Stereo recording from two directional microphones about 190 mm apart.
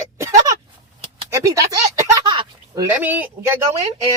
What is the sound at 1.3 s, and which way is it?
Speech, 15° right (ahead or behind).